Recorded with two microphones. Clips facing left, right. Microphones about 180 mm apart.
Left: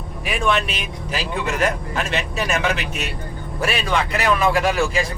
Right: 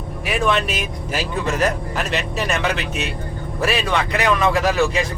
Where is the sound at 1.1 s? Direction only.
40° right (ahead or behind).